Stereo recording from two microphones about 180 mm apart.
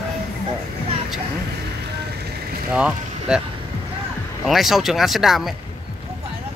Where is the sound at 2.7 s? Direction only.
5° right (ahead or behind).